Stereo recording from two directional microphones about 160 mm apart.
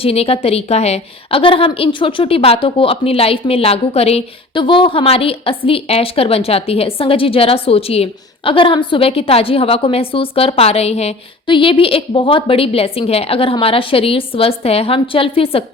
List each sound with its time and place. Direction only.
0.0 s a woman's voice: 40° left (ahead or behind)